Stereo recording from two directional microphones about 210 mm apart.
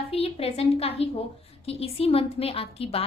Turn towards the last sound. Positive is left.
turn(degrees=25)  # may be behind; listen again after turning